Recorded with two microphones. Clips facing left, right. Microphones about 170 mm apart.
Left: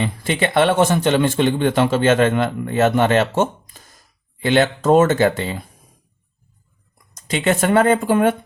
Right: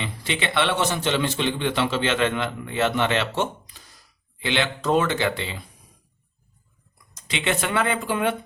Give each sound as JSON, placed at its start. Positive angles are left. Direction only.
{"t": 0.0, "sound": "speech", "side_deg": 45}
{"t": 7.2, "sound": "speech", "side_deg": 45}